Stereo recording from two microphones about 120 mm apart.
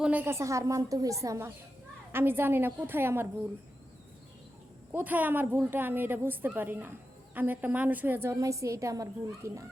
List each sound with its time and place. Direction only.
0.0 s a woman's voice: 15° right (ahead or behind)
4.9 s a woman's voice: 15° right (ahead or behind)